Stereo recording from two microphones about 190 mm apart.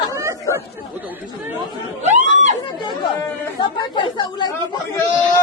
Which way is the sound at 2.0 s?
40° right (ahead or behind).